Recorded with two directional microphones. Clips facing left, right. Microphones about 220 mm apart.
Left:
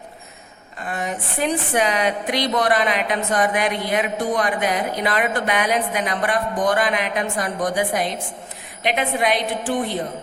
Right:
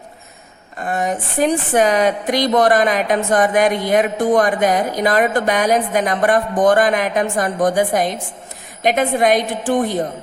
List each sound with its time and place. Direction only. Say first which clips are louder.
0.8 s speech: right 6 dB; 45° right (ahead or behind)